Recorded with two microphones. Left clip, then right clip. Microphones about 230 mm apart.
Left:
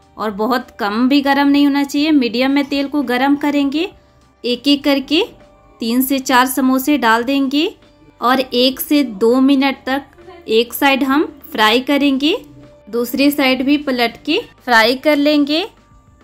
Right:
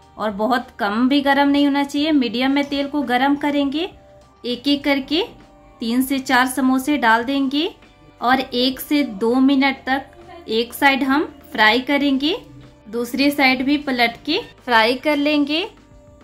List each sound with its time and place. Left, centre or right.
0.2 s a woman's voice: centre